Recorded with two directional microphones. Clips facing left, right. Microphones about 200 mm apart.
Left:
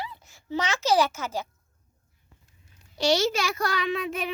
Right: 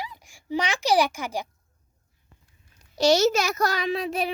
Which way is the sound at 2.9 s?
45° right (ahead or behind).